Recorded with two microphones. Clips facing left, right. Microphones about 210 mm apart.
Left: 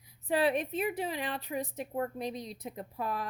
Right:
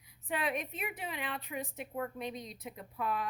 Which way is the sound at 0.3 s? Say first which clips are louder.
Left 7 dB; 35° left (ahead or behind).